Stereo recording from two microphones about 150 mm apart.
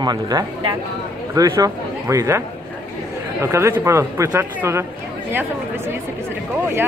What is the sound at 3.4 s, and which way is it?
Speech, 20° right (ahead or behind).